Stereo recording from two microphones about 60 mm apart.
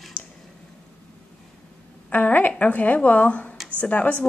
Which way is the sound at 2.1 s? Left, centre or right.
Left.